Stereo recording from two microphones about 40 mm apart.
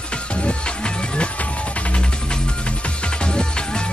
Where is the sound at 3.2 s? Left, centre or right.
Left.